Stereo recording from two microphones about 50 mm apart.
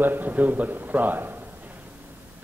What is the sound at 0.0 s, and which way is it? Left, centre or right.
A man's voice, right.